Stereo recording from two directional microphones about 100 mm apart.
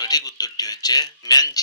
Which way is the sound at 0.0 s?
40° left (ahead or behind).